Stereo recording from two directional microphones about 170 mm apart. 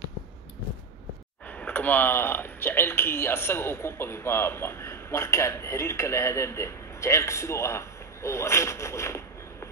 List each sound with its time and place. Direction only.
1.6 s speech: 10° left (ahead or behind)